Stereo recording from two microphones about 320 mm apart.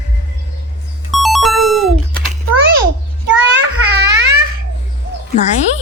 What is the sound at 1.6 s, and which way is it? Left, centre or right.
Music, right.